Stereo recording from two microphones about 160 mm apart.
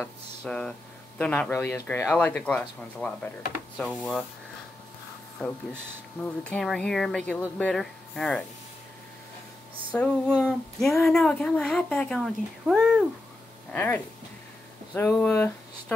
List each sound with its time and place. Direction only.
0.0 s speech: 5° left (ahead or behind)
5.4 s speech: centre (ahead or behind)
9.9 s speech: 5° left (ahead or behind)
13.7 s speech: 10° left (ahead or behind)